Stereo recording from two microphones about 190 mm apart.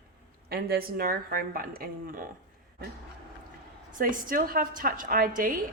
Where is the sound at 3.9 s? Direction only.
45° right (ahead or behind).